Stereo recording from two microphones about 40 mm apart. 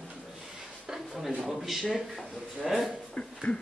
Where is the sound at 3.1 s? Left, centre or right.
Left.